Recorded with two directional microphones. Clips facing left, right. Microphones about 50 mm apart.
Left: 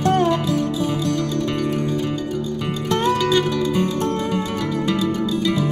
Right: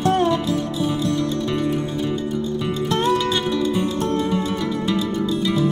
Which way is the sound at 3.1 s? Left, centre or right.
Left.